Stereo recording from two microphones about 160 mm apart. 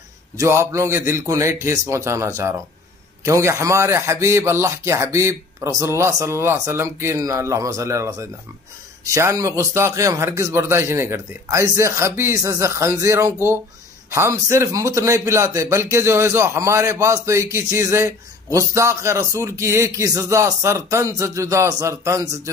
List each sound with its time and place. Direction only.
0.4 s a man's voice: 15° right (ahead or behind)